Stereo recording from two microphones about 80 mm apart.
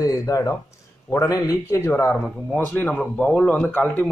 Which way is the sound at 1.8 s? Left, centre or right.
Left.